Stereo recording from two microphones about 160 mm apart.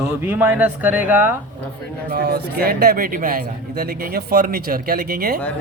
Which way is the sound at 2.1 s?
70° right (ahead or behind).